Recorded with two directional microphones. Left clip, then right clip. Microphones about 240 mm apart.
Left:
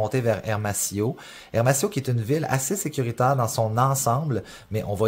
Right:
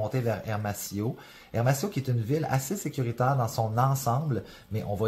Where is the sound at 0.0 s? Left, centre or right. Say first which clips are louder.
Left 6 dB; left.